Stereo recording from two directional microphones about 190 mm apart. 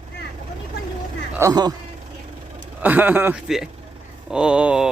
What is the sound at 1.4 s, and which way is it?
Speech, 20° right (ahead or behind).